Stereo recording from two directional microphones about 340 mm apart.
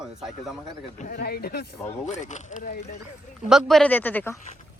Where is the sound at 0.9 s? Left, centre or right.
Left.